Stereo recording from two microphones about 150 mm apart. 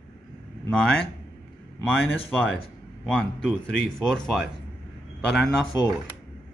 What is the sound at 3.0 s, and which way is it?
Speech, 5° left (ahead or behind).